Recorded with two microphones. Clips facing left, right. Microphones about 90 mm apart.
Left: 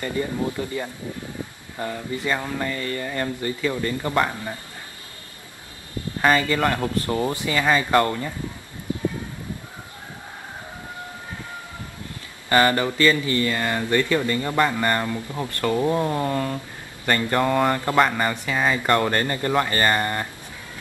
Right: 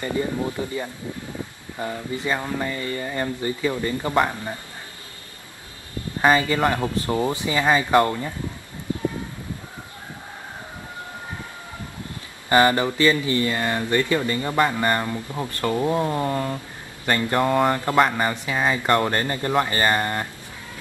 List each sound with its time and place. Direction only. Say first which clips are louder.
0.0 s speech: right 1 dB; 20° right (ahead or behind)
1.8 s speech: even; 15° right (ahead or behind)
6.2 s speech: right 1 dB; 15° right (ahead or behind)
12.4 s speech: right 1 dB; 20° right (ahead or behind)